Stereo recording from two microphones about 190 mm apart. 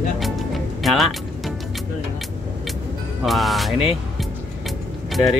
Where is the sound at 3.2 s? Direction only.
Centre (ahead or behind).